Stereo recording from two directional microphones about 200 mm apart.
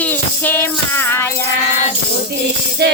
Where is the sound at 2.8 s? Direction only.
55° right (ahead or behind).